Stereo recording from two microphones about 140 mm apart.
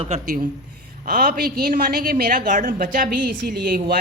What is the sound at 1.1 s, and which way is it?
A woman's voice, 80° right.